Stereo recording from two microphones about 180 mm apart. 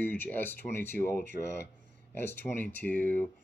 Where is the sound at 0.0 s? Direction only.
10° left (ahead or behind).